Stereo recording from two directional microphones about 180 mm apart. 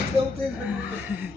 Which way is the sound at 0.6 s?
10° right (ahead or behind).